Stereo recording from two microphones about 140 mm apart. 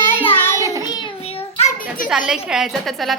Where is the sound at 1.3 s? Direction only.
45° left (ahead or behind).